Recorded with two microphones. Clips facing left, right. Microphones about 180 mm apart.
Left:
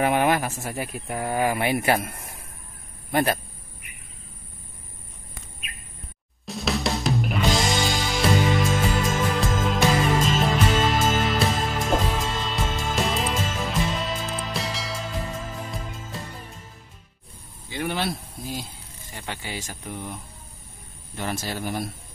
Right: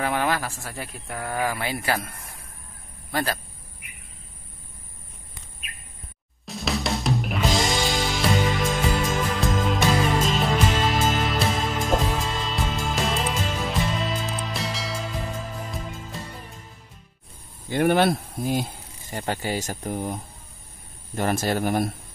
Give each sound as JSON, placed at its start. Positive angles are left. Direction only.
{"t": 0.0, "sound": "speech", "side_deg": 20}
{"t": 6.4, "sound": "music", "side_deg": 0}
{"t": 17.6, "sound": "a sound", "side_deg": -50}
{"t": 19.1, "sound": "speech", "side_deg": -45}
{"t": 21.2, "sound": "speech", "side_deg": -50}